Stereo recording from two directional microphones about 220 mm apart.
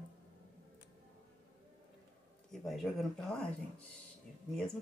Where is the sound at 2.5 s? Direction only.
Centre (ahead or behind).